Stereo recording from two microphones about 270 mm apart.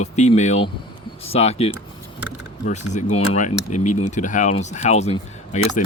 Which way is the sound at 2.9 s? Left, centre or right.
Left.